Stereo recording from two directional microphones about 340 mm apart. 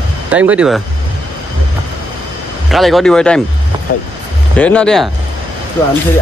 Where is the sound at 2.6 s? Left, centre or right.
Centre.